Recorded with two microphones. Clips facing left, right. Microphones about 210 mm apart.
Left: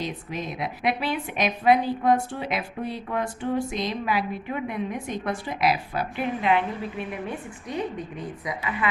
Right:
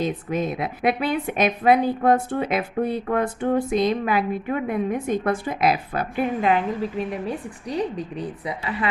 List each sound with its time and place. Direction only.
0.3 s a woman's voice: 50° right (ahead or behind); by 8.9 s 35° right (ahead or behind)